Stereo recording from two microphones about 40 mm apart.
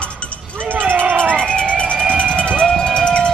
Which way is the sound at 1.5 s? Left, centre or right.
Centre.